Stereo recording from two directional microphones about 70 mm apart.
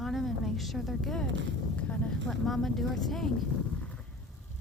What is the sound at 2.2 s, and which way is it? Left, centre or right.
A woman's voice, centre.